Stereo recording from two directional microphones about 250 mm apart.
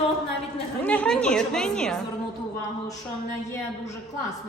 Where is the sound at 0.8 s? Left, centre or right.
Centre.